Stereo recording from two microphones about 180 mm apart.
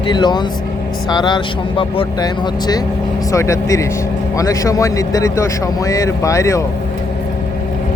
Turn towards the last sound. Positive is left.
turn(degrees=15)  # may be behind; listen again after turning